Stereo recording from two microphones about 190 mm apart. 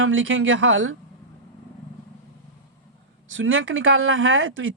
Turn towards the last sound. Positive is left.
turn(degrees=-90)